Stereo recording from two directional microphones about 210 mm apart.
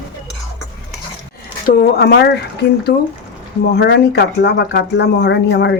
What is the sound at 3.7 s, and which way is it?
Speech, 55° left (ahead or behind).